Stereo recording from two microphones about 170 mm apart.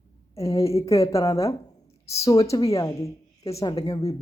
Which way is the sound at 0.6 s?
15° left (ahead or behind).